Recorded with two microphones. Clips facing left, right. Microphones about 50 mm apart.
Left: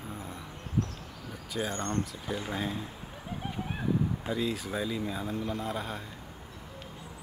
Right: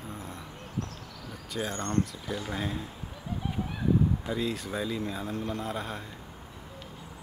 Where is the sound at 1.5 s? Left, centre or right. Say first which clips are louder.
Even; centre.